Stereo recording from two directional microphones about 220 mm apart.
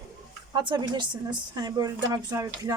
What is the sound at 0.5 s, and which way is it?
A woman's voice, 20° right (ahead or behind).